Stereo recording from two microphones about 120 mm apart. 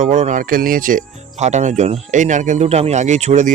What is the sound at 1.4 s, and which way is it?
Speech, 75° right (ahead or behind).